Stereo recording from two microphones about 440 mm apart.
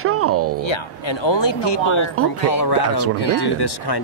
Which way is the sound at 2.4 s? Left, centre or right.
Left.